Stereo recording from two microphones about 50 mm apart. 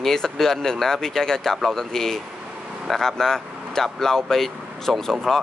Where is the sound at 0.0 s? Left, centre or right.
Centre.